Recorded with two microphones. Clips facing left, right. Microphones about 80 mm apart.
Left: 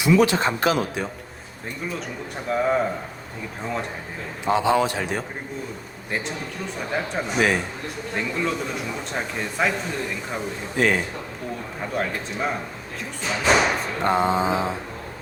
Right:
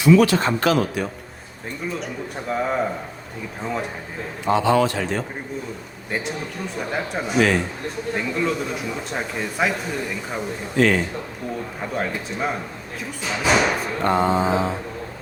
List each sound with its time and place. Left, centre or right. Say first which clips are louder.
0.0 s speech: right 3 dB; centre
2.5 s speech: left 1 dB; centre
4.5 s speech: right 2 dB; centre
6.1 s speech: right 2 dB; centre
7.3 s a sound: right 3 dB; centre
8.1 s speech: right 2 dB; centre
10.8 s a sound: right 3 dB; centre
11.9 s speech: right 1 dB; centre
14.0 s a sound: right 1 dB; centre